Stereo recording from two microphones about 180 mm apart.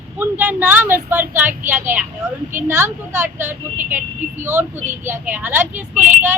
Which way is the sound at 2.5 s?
15° right (ahead or behind).